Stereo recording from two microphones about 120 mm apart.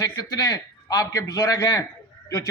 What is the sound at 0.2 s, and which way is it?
Speech, 30° left (ahead or behind).